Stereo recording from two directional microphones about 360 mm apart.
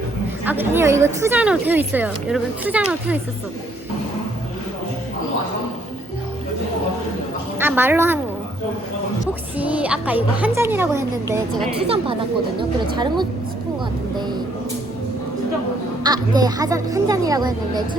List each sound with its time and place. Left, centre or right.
0.4 s speech: centre
7.6 s speech: centre
9.6 s speech: centre
11.8 s speech: centre
16.0 s speech: centre